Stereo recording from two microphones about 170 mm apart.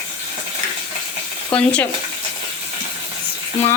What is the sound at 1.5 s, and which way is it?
Speech, 5° left (ahead or behind).